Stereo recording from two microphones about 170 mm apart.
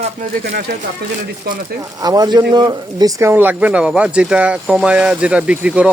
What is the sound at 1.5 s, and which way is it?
Speech, 65° right (ahead or behind).